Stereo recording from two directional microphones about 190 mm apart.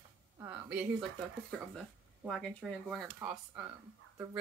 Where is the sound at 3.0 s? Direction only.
10° right (ahead or behind).